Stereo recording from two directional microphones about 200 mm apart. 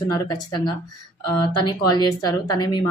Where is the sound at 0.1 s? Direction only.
20° left (ahead or behind).